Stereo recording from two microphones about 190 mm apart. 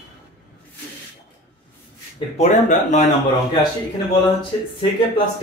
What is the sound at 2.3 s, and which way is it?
Speech, 35° left (ahead or behind).